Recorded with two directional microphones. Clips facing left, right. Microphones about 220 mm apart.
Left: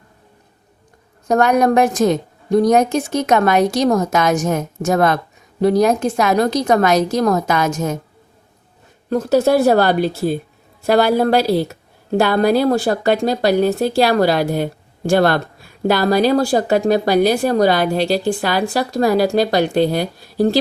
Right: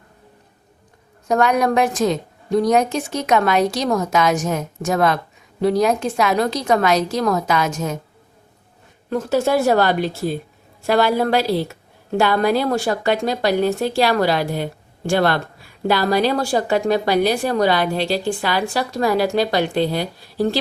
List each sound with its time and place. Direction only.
1.3 s a woman's voice: 45° left (ahead or behind)
9.0 s speech: 40° left (ahead or behind)